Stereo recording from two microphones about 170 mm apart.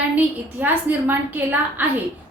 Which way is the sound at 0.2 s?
10° right (ahead or behind).